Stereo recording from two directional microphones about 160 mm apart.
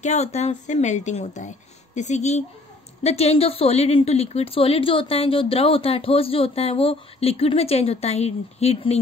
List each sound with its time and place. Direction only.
0.0 s a woman's voice: 45° left (ahead or behind)